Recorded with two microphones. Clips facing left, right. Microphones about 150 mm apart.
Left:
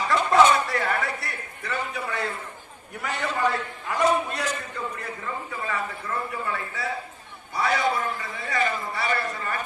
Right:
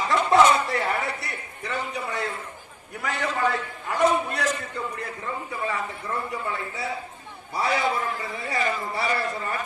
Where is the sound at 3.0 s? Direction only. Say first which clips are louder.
Right 1 dB; centre (ahead or behind).